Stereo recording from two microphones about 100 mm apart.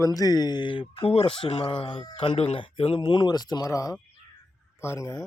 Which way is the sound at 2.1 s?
75° left (ahead or behind).